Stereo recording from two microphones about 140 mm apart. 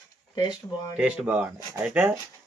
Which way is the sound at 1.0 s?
10° right (ahead or behind).